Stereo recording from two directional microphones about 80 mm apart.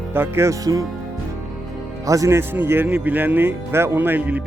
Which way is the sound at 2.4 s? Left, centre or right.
Right.